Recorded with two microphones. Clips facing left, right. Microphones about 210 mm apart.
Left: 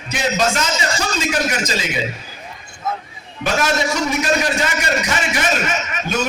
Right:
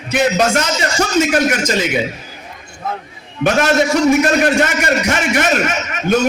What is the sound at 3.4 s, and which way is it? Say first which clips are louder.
A man's voice: right 6 dB; 60° right (ahead or behind).